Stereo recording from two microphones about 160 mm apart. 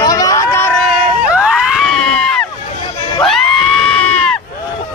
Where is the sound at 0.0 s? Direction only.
20° left (ahead or behind).